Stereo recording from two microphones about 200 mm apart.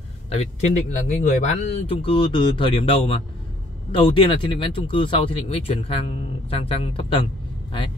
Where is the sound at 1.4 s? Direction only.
35° left (ahead or behind).